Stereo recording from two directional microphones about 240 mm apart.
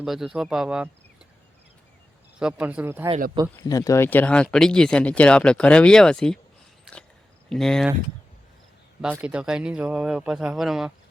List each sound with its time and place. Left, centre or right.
0.0 s speech: centre
2.4 s speech: centre
3.4 s speech: centre
3.7 s speech: centre
7.5 s speech: centre
9.0 s speech: centre